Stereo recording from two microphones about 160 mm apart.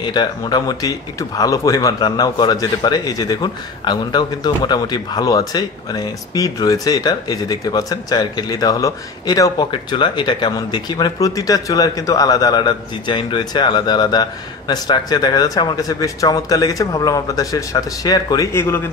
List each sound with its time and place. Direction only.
0.0 s a man's voice: 25° left (ahead or behind)